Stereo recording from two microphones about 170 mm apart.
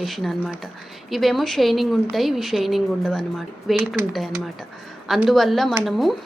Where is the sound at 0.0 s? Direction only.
Centre (ahead or behind).